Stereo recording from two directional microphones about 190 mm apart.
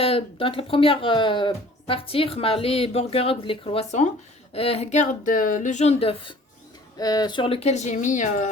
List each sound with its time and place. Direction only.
0.0 s speech: 30° left (ahead or behind)